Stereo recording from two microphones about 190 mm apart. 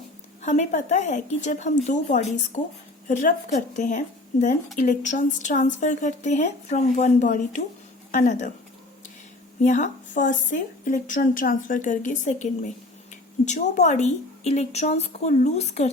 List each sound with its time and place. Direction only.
0.4 s speech: 35° left (ahead or behind)
9.6 s speech: 40° left (ahead or behind)